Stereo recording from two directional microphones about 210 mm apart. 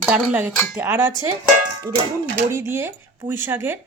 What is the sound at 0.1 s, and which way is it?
A woman's voice, 5° right (ahead or behind).